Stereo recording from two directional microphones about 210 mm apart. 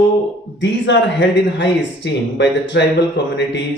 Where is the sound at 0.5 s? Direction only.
60° left (ahead or behind).